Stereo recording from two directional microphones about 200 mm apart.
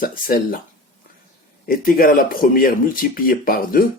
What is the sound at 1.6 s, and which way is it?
Speech, 45° left (ahead or behind).